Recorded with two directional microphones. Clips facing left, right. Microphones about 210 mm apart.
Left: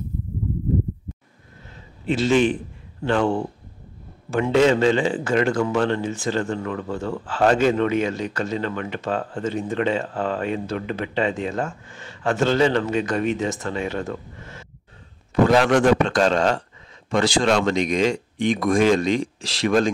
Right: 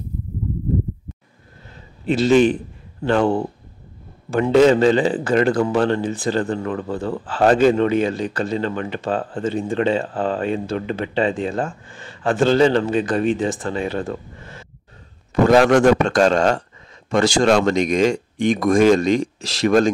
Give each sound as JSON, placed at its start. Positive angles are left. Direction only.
{"t": 2.0, "sound": "a man's voice", "side_deg": -40}
{"t": 15.4, "sound": "speech", "side_deg": -45}